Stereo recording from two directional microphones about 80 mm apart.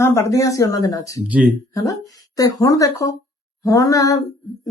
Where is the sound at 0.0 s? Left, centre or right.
Left.